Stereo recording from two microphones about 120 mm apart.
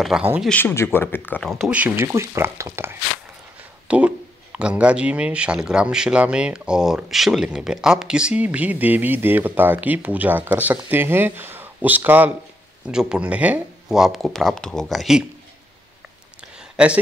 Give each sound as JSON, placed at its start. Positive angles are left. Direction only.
{"t": 0.1, "sound": "speech", "side_deg": -5}
{"t": 0.5, "sound": "speech", "side_deg": 15}
{"t": 1.4, "sound": "speech", "side_deg": 0}
{"t": 1.7, "sound": "speech", "side_deg": -10}
{"t": 2.1, "sound": "speech", "side_deg": -25}
{"t": 16.7, "sound": "speech", "side_deg": -10}